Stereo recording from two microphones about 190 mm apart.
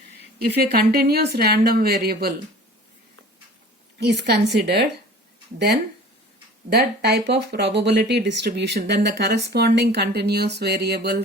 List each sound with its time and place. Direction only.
0.5 s speech: 55° right (ahead or behind)
4.0 s speech: 60° right (ahead or behind)